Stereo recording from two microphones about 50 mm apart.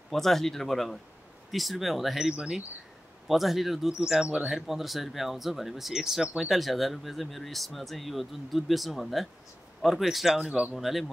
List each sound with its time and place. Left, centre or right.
0.1 s speech: centre
4.1 s speech: centre
4.5 s speech: centre
10.4 s speech: right
10.7 s speech: centre